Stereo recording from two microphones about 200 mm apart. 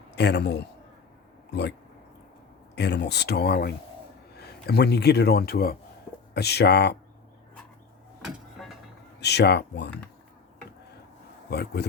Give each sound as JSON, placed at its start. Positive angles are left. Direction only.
{"t": 0.2, "sound": "speech", "side_deg": 60}
{"t": 2.7, "sound": "speech", "side_deg": 55}
{"t": 8.6, "sound": "music", "side_deg": 0}
{"t": 9.2, "sound": "speech", "side_deg": 55}
{"t": 11.5, "sound": "a man's voice", "side_deg": 55}